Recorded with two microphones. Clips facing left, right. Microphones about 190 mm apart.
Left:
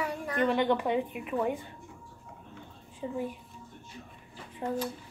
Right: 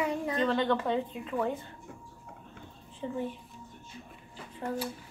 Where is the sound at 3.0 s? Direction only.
15° left (ahead or behind).